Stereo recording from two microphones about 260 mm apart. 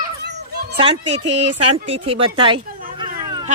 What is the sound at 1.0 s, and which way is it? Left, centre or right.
Speech, right.